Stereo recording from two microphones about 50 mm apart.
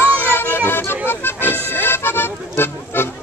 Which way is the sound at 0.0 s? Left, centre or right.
Left.